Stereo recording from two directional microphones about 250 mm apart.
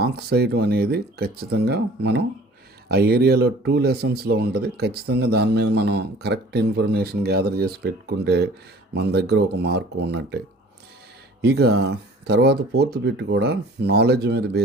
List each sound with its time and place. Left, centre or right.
0.0 s speech: right
11.4 s speech: right